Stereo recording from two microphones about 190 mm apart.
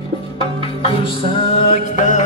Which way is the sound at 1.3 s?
30° left (ahead or behind).